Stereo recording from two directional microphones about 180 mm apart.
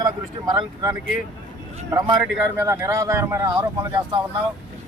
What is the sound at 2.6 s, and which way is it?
Speech, 15° right (ahead or behind).